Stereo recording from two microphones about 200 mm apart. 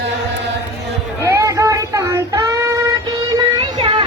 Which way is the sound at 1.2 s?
15° right (ahead or behind).